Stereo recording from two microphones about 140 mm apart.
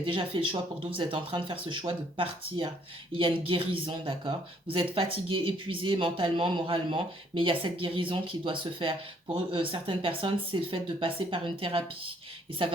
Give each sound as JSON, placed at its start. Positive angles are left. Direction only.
{"t": 0.0, "sound": "speech", "side_deg": -35}